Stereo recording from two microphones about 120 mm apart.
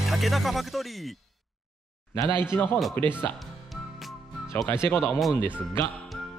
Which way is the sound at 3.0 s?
15° left (ahead or behind).